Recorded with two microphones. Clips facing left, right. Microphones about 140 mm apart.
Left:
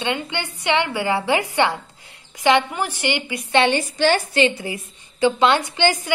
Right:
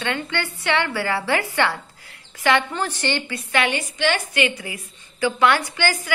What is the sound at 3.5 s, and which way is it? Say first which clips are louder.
A woman's voice: left 5 dB; 30° left (ahead or behind).